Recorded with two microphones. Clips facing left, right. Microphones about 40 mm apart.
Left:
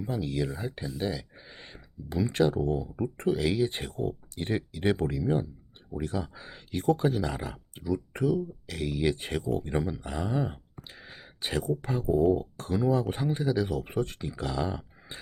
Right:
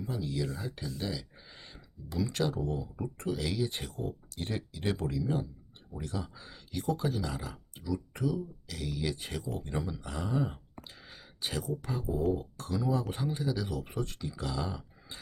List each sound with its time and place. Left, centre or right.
0.0 s speech: left
0.5 s speech: left